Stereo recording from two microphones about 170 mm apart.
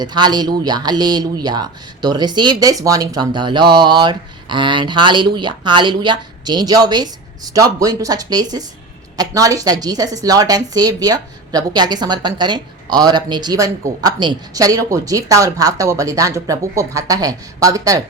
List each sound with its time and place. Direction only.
0.0 s a woman's voice: 25° right (ahead or behind)